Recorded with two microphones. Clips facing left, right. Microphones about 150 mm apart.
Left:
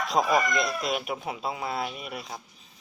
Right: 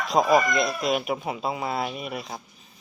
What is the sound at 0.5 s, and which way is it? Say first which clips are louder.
Speech: right 4 dB; centre (ahead or behind).